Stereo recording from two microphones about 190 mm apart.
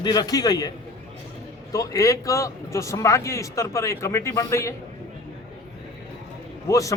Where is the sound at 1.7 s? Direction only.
15° left (ahead or behind).